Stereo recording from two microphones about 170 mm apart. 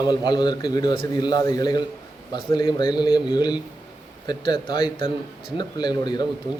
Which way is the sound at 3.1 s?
5° right (ahead or behind).